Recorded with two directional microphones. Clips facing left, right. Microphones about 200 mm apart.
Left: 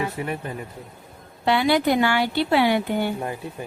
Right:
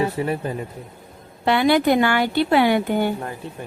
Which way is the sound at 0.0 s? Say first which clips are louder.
Right 5 dB; 35° right (ahead or behind).